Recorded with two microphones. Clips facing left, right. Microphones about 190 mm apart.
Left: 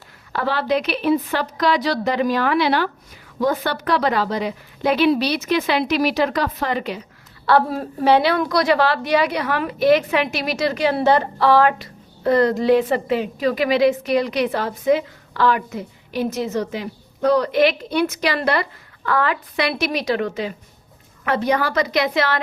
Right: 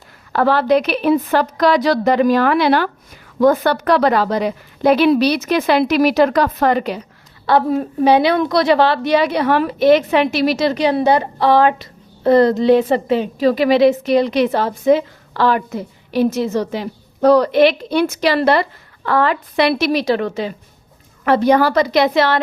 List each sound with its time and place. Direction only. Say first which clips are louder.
0.3 s a woman's voice: right 7 dB; 45° right (ahead or behind)
7.4 s a woman's voice: right 3 dB; 20° right (ahead or behind)